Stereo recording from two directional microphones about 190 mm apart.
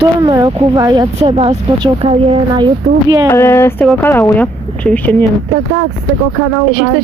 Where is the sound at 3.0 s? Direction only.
15° right (ahead or behind).